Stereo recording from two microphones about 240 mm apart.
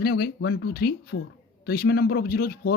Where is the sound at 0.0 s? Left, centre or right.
Left.